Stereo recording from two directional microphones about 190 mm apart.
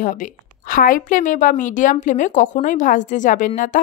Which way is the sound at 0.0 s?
45° left (ahead or behind).